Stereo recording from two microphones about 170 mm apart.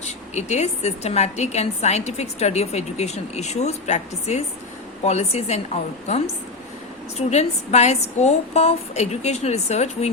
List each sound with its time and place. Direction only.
0.0 s a woman's voice: 40° left (ahead or behind)